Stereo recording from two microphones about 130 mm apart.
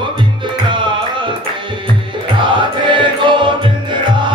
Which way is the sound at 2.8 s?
40° right (ahead or behind).